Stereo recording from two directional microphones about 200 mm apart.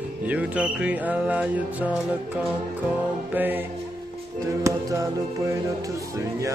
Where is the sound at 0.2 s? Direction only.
5° right (ahead or behind).